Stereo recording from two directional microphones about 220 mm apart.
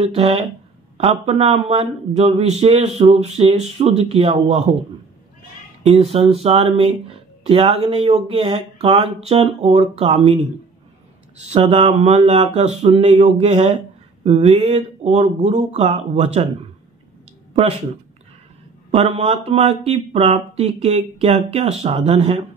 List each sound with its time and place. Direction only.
0.0 s speech: 30° right (ahead or behind)
6.1 s speech: 25° right (ahead or behind)
11.4 s mantra: 30° right (ahead or behind)
14.2 s speech: 25° right (ahead or behind)
18.9 s speech: 30° right (ahead or behind)